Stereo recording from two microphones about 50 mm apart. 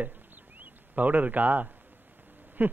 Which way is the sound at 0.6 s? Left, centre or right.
Right.